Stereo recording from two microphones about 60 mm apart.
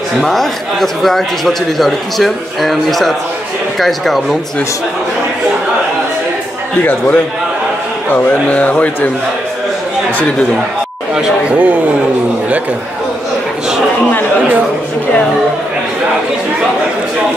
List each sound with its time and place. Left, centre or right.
0.2 s a man's voice: centre
8.1 s speech: left
11.5 s a man's voice: right